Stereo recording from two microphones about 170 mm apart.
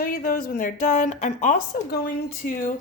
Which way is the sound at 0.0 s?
55° left (ahead or behind).